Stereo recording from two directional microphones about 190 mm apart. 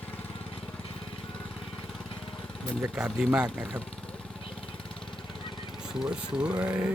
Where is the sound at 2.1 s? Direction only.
Centre (ahead or behind).